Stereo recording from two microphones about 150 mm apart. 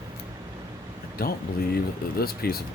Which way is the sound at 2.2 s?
90° left.